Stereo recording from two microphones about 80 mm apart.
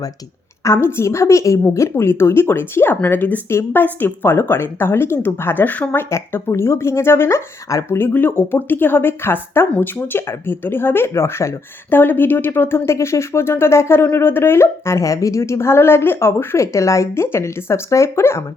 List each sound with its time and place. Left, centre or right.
0.6 s speech: left
6.1 s speech: left
11.9 s speech: left